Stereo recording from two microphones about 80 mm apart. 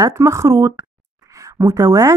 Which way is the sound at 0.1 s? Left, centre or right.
Right.